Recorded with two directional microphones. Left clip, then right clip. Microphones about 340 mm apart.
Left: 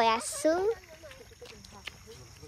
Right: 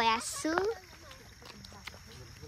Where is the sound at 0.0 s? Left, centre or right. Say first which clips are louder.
Left 4 dB; centre.